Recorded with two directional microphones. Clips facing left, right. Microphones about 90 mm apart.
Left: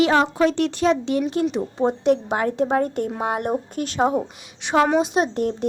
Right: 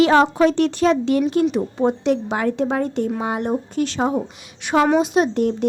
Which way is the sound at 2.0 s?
45° left (ahead or behind).